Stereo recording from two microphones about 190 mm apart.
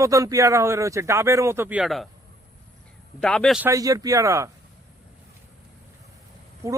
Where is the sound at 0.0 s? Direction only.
15° right (ahead or behind); by 2.0 s centre (ahead or behind).